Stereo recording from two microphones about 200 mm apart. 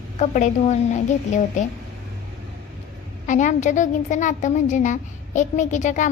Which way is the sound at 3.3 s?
40° left (ahead or behind).